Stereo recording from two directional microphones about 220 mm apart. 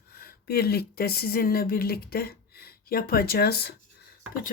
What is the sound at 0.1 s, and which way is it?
Speech, 45° left (ahead or behind).